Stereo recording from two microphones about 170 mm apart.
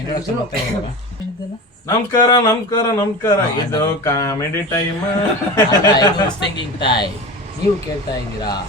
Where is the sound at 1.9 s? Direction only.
20° left (ahead or behind).